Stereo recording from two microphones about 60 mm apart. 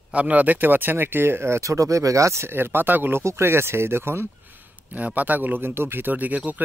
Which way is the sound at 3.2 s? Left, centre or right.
Right.